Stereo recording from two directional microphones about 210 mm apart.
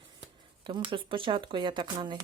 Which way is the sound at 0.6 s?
25° right (ahead or behind).